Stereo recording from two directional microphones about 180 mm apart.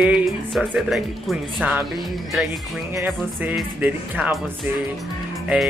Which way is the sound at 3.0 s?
5° right (ahead or behind).